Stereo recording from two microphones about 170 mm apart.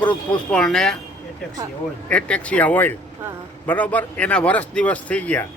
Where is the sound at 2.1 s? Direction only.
5° left (ahead or behind).